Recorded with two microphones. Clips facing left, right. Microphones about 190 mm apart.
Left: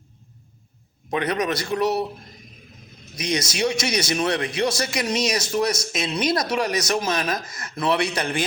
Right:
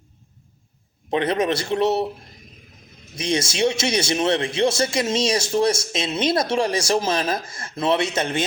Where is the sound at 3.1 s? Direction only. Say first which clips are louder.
Right 2 dB; 25° right (ahead or behind).